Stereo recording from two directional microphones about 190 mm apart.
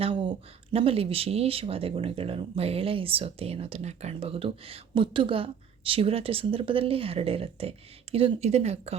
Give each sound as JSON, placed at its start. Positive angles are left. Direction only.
{"t": 0.0, "sound": "speech", "side_deg": -25}